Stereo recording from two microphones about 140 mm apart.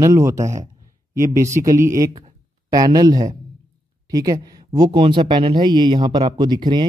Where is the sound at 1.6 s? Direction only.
20° right (ahead or behind).